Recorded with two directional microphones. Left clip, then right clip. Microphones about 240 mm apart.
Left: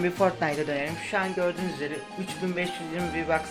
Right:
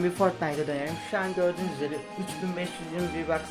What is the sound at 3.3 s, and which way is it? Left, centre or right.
Speech, centre.